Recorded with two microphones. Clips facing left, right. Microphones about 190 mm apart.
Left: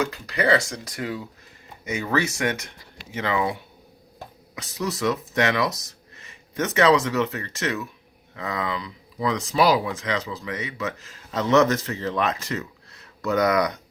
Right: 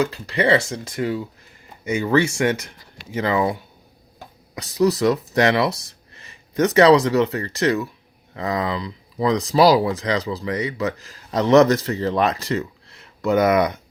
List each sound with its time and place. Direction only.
0.0 s speech: 30° right (ahead or behind)
4.5 s speech: 35° right (ahead or behind)